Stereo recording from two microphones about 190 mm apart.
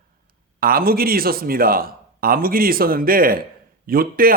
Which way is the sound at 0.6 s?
50° right (ahead or behind).